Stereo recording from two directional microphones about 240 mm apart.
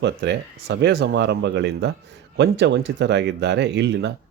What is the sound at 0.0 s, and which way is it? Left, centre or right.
Speech, right.